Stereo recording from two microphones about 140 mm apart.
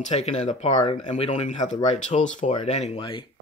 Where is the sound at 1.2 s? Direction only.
40° left (ahead or behind).